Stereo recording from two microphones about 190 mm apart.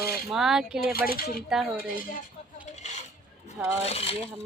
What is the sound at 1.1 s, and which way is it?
Speech, 50° left (ahead or behind).